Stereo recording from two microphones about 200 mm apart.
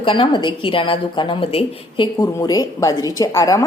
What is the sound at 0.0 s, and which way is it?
A woman's voice, 25° left (ahead or behind).